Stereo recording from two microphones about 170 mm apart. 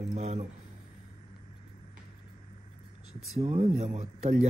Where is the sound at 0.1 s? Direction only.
40° right (ahead or behind).